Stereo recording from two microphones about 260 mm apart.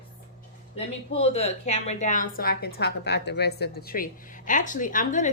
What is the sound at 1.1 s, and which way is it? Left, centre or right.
A woman's voice, left.